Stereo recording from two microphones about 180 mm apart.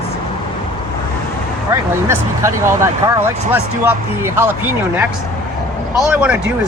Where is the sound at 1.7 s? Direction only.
15° right (ahead or behind).